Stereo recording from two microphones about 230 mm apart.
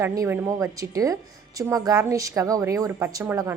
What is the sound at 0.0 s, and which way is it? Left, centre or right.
A woman's voice, centre.